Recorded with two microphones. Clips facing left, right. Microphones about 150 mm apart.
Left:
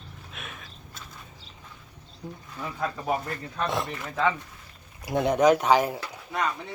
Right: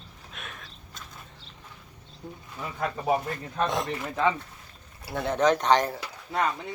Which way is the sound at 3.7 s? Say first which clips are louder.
Right 1 dB; centre (ahead or behind).